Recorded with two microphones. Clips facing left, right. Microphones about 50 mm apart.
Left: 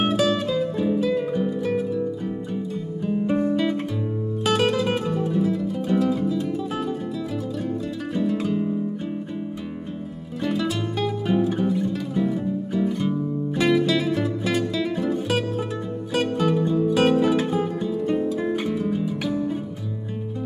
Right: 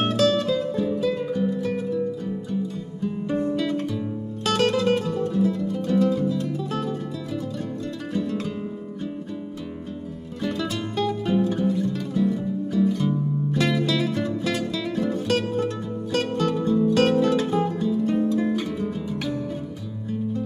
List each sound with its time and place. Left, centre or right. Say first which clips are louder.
0.0 s music: even; centre
2.5 s music: left 1 dB; centre
3.5 s guitar: left 2 dB; centre
4.5 s music: right 1 dB; centre
8.1 s music: left 4 dB; centre
10.4 s music: left 3 dB; centre
13.6 s music: left 3 dB; centre